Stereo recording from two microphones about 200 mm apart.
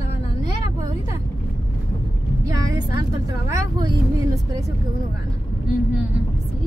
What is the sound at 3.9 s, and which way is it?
Speech, 15° right (ahead or behind).